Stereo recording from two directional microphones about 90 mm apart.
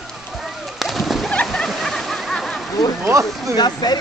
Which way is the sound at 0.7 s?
Centre (ahead or behind).